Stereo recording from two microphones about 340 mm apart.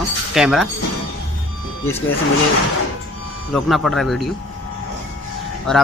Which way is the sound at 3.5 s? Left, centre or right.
Centre.